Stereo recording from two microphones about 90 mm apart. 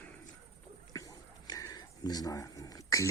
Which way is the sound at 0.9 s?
40° left (ahead or behind).